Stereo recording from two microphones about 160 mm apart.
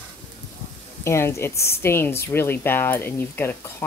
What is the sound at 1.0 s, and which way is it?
Speech, 15° left (ahead or behind).